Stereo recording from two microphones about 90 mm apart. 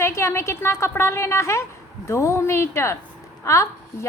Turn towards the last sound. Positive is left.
turn(degrees=35)  # may be behind; listen again after turning